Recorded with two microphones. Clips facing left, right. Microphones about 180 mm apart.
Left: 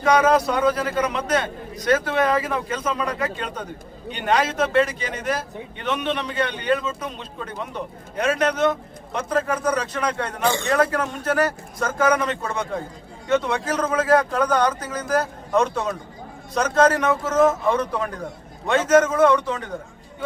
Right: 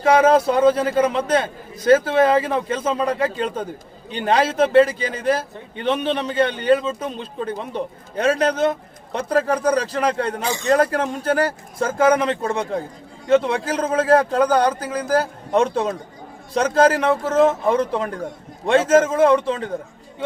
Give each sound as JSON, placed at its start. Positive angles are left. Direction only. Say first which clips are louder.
{"t": 0.0, "sound": "a man's voice", "louder": "right 3 dB", "side_deg": -30}